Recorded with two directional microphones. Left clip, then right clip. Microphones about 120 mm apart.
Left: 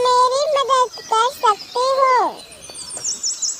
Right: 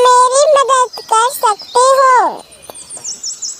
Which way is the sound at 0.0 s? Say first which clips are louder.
Right 7 dB; 60° right (ahead or behind).